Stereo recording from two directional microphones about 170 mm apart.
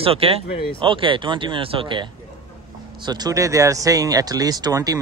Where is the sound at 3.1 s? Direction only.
25° right (ahead or behind).